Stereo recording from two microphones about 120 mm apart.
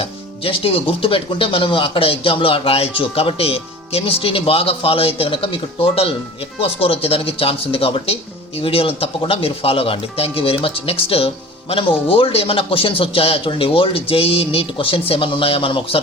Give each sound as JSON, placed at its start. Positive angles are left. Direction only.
{"t": 0.0, "sound": "speech", "side_deg": 50}